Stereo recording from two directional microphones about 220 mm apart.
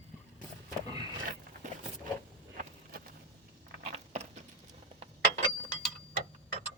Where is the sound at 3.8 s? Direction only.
30° right (ahead or behind).